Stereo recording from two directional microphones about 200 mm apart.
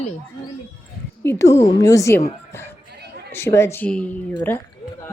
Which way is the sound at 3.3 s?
10° left (ahead or behind).